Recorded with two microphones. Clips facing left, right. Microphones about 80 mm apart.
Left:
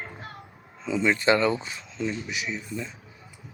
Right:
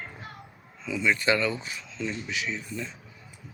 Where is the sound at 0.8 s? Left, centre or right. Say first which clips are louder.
Left 2 dB; left.